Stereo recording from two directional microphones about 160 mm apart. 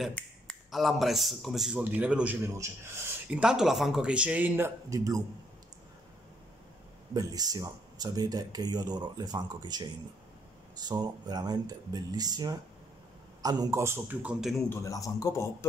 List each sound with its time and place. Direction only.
0.1 s speech: centre (ahead or behind); by 5.2 s 20° right (ahead or behind)
7.2 s speech: 25° right (ahead or behind); by 14.6 s 5° right (ahead or behind)
14.7 s a man's voice: 20° left (ahead or behind)